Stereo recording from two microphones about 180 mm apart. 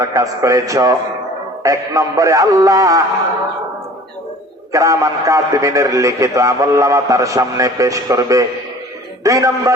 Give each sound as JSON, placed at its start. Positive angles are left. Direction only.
{"t": 0.0, "sound": "a man's voice", "side_deg": -20}
{"t": 4.7, "sound": "a man's voice", "side_deg": -15}